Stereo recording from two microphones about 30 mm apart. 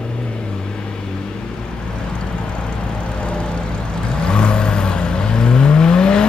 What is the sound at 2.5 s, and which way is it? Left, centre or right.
Vehicle, left.